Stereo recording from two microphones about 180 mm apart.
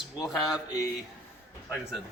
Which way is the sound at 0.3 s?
Centre (ahead or behind).